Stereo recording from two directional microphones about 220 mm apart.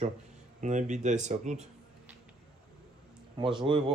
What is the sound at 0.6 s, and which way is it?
Speech, 35° right (ahead or behind).